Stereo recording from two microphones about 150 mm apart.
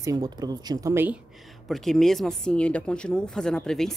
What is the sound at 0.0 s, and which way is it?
Speech, 25° right (ahead or behind).